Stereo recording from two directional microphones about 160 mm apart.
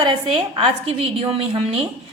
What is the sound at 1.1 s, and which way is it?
Speech, 35° right (ahead or behind).